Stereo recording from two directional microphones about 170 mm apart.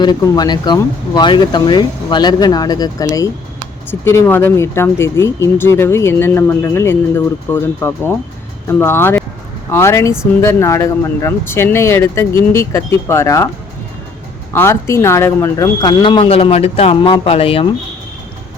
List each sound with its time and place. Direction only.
0.0 s speech: 25° left (ahead or behind)
14.5 s speech: 15° left (ahead or behind); by 17.7 s 35° left (ahead or behind)